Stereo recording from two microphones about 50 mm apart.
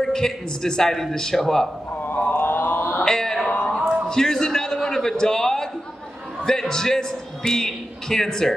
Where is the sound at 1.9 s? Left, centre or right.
Left.